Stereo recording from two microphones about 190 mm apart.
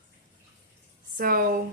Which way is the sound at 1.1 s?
50° right (ahead or behind).